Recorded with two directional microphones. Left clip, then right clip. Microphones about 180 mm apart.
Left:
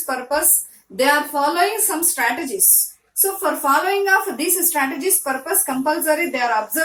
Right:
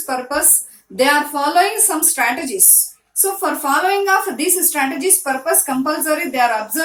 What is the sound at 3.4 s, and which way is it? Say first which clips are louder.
A woman's voice: right 1 dB; 35° right (ahead or behind).